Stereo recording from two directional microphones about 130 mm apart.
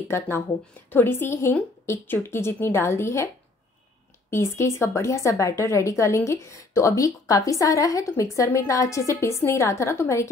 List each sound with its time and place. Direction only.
0.1 s a woman's voice: 20° left (ahead or behind)
4.3 s a woman's voice: 20° left (ahead or behind)